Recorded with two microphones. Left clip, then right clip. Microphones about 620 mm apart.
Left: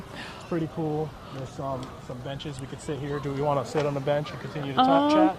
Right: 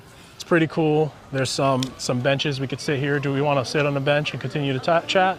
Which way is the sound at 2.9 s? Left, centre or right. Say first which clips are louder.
Right 8 dB; right.